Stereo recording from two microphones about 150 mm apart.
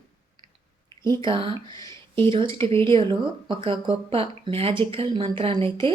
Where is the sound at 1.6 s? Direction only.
25° left (ahead or behind).